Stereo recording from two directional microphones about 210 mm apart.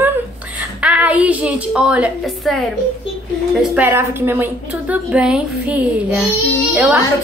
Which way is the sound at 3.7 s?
10° right (ahead or behind).